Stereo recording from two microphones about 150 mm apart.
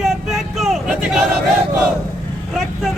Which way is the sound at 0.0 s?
Centre (ahead or behind).